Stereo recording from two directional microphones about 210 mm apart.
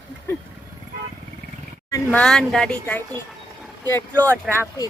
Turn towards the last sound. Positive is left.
turn(degrees=0)  # may be behind; listen again after turning